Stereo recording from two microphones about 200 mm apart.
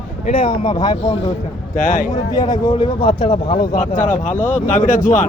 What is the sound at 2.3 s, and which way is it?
A man's voice, 20° left (ahead or behind).